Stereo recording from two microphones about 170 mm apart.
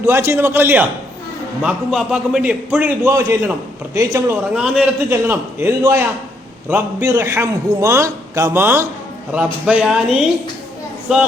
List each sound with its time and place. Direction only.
0.0 s a man's voice: 15° right (ahead or behind)
4.5 s a man's voice: 5° right (ahead or behind)